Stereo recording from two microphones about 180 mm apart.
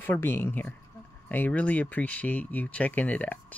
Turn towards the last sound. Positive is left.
turn(degrees=10)  # may be behind; listen again after turning